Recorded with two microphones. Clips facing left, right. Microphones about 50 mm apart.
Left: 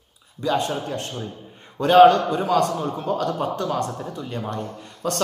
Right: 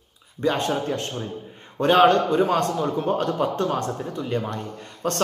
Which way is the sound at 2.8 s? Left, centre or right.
Centre.